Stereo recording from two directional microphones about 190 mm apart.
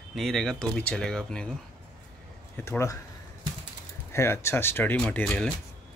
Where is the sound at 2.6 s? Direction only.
15° left (ahead or behind).